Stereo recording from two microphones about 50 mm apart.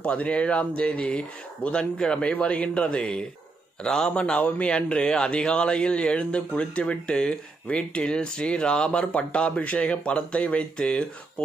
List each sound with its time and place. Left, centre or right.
0.0 s a man's voice: left
4.1 s speech: left